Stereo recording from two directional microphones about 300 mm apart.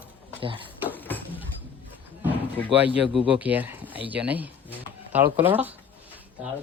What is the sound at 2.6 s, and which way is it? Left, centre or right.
Speech, centre.